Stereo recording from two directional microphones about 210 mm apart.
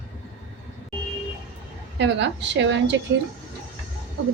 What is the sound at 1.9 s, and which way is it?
Speech, 55° right (ahead or behind).